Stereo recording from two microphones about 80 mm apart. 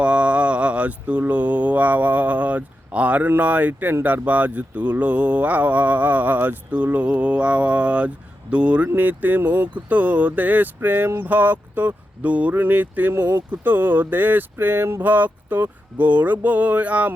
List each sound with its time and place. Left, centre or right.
0.0 s speech: centre